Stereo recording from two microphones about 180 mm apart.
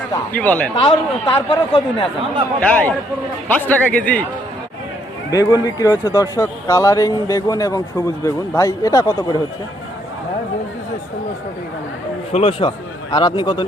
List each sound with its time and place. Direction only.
0.3 s a man's voice: 10° left (ahead or behind)
0.8 s speech: 25° left (ahead or behind)
2.6 s a man's voice: 10° left (ahead or behind)
5.3 s speech: 20° left (ahead or behind)
12.3 s speech: 35° left (ahead or behind)